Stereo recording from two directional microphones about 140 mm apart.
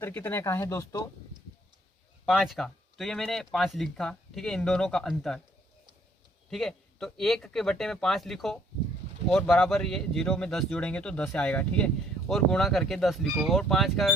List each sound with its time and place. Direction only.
0.0 s speech: 15° left (ahead or behind)
2.2 s speech: 5° left (ahead or behind)
6.5 s speech: 5° left (ahead or behind)